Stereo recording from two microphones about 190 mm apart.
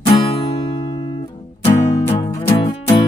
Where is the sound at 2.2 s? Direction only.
30° left (ahead or behind).